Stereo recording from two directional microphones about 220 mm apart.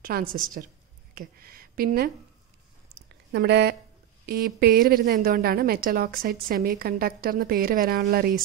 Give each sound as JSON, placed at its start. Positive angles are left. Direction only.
{"t": 0.0, "sound": "a woman's voice", "side_deg": -40}
{"t": 3.3, "sound": "a woman's voice", "side_deg": -50}